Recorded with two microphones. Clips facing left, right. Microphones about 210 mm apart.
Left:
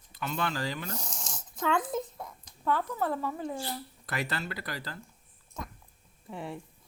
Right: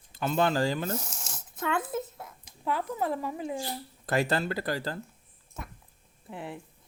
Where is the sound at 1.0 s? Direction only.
5° right (ahead or behind).